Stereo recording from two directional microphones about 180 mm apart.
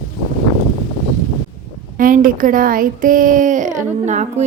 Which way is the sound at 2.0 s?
50° right (ahead or behind).